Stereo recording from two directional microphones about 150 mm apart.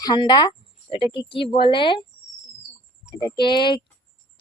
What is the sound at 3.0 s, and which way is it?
Speech, 30° left (ahead or behind).